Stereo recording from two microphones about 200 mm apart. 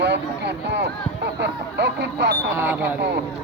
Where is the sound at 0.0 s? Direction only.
60° right (ahead or behind).